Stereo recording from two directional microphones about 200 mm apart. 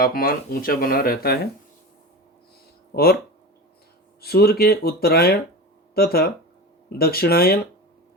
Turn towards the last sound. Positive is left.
turn(degrees=50)  # may be behind; listen again after turning